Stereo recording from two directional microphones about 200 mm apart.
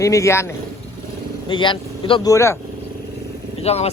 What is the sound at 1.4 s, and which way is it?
Speech, 25° left (ahead or behind).